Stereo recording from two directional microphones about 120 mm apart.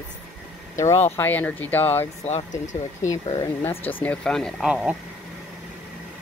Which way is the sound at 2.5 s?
90° left.